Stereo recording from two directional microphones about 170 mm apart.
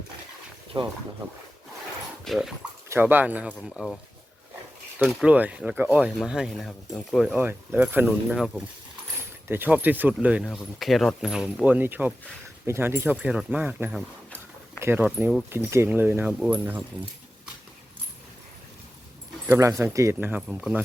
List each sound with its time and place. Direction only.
0.7 s speech: 25° right (ahead or behind)
2.2 s speech: centre (ahead or behind)
2.9 s speech: 10° right (ahead or behind)
5.0 s speech: 10° right (ahead or behind)
7.3 s speech: 10° right (ahead or behind)
19.5 s speech: 15° right (ahead or behind)